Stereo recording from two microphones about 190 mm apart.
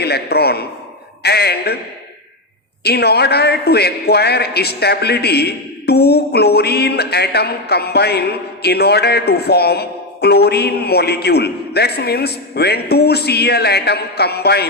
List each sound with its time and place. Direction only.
0.0 s a man's voice: 55° left (ahead or behind)
2.8 s a man's voice: 55° left (ahead or behind)